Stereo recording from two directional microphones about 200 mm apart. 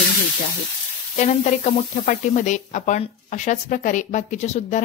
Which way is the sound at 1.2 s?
35° left (ahead or behind).